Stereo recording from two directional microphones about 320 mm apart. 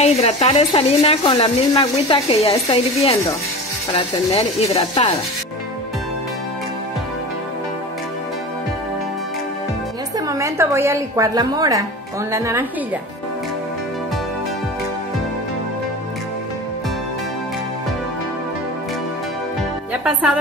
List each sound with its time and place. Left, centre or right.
0.0 s speech: centre
10.1 s a woman's voice: centre
19.9 s music: centre